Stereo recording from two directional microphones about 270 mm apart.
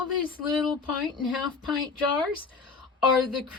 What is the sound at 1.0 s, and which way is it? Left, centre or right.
Speech, centre.